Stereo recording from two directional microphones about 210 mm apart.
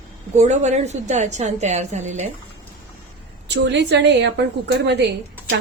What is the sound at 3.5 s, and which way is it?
A woman's voice, 55° right (ahead or behind).